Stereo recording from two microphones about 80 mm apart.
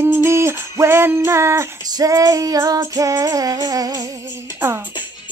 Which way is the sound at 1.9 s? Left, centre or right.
Right.